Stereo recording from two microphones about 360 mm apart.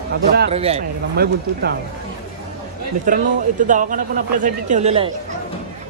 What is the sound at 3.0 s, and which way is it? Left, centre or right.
Speech, right.